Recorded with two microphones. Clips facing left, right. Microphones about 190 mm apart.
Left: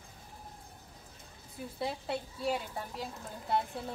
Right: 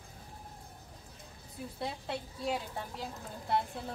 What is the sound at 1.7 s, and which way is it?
A woman's voice, centre (ahead or behind).